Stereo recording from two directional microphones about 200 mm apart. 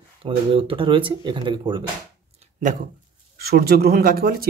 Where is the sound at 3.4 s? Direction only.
50° right (ahead or behind).